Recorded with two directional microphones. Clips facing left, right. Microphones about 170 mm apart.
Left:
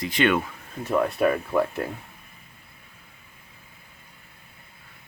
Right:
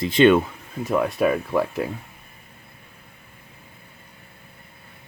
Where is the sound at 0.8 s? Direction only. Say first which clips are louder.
Right 1 dB; 10° right (ahead or behind).